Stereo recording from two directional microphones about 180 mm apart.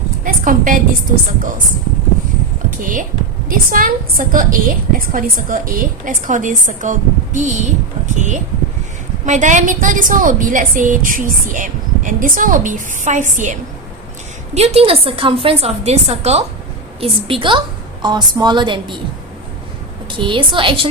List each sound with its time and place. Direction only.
0.3 s a woman's voice: 50° right (ahead or behind)
2.8 s a woman's voice: 45° right (ahead or behind); by 18.9 s 25° right (ahead or behind)
20.1 s a woman's voice: 25° right (ahead or behind)